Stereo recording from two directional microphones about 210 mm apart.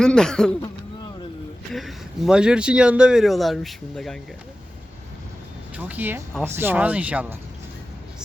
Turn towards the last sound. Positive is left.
turn(degrees=-5)  # may be behind; listen again after turning